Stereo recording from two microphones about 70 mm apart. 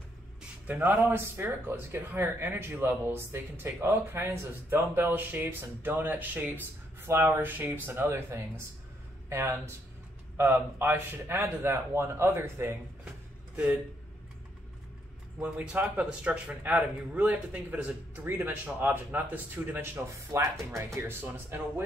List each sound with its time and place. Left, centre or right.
0.7 s a man's voice: right
8.1 s a man's voice: right
10.3 s a man's voice: right
15.4 s speech: centre
20.1 s speech: right
21.1 s speech: right